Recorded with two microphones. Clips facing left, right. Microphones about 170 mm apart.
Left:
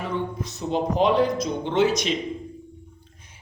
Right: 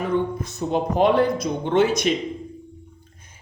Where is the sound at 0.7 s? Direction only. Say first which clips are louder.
Right 2 dB; 55° right (ahead or behind).